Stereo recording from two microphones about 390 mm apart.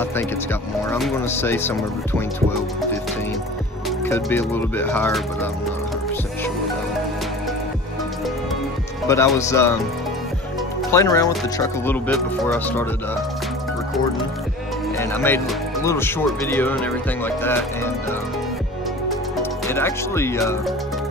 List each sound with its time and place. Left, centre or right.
0.0 s speech: centre
4.0 s speech: centre
9.0 s speech: centre
10.8 s speech: centre
15.0 s speech: centre
19.0 s music: centre